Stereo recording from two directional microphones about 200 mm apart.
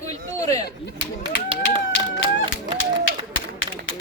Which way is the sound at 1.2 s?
25° right (ahead or behind).